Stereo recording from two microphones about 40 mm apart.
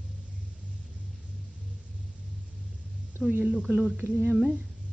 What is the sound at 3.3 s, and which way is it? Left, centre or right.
Speech, right.